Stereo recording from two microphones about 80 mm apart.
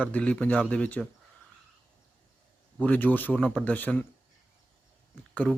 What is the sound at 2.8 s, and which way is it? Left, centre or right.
Speech, left.